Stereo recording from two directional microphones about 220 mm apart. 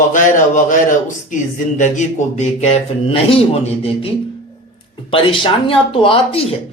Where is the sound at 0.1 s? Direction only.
35° left (ahead or behind).